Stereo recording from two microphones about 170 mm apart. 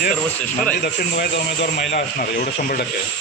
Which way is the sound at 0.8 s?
80° left.